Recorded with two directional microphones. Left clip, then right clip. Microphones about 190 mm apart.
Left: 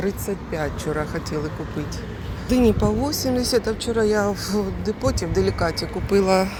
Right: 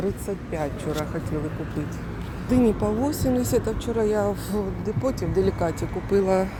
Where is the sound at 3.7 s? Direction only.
Centre (ahead or behind).